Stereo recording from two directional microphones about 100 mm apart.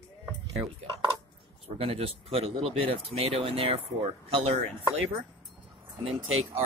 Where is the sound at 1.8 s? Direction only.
75° right (ahead or behind).